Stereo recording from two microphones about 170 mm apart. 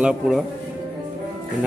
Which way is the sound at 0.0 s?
5° right (ahead or behind).